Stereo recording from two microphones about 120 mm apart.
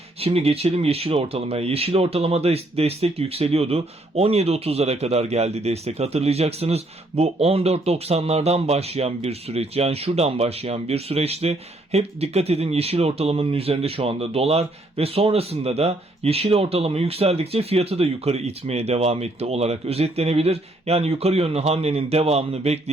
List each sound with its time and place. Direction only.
0.2 s speech: 55° right (ahead or behind)